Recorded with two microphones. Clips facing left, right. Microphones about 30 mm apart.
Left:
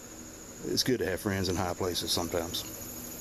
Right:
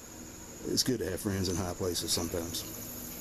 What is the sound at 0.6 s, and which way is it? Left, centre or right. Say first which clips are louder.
Speech: left 2 dB; centre.